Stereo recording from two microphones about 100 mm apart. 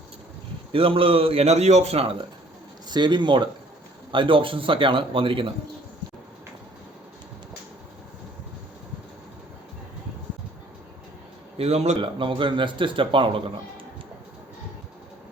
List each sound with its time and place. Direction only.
0.7 s a man's voice: 65° right (ahead or behind)
2.9 s speech: 50° right (ahead or behind)
11.5 s speech: 85° right; by 13.4 s 60° right (ahead or behind)